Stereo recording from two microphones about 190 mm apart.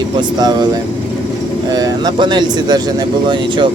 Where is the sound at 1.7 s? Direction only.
20° right (ahead or behind).